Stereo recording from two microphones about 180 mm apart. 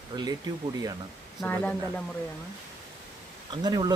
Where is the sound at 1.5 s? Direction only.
10° left (ahead or behind).